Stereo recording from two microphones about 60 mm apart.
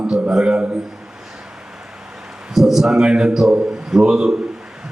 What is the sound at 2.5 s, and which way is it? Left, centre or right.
Speech, centre.